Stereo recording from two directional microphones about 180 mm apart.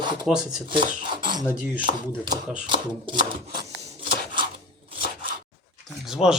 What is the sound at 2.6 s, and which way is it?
Speech, 25° right (ahead or behind).